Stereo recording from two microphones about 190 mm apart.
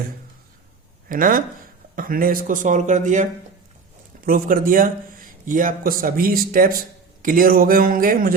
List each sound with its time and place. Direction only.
1.0 s a man's voice: 45° right (ahead or behind)
4.3 s a man's voice: 50° right (ahead or behind)